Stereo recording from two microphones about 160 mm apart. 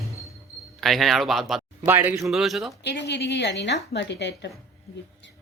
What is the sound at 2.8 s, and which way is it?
A woman's voice, 90° left.